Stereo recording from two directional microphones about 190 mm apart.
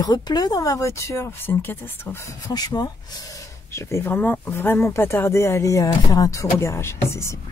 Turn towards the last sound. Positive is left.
turn(degrees=15)  # may be behind; listen again after turning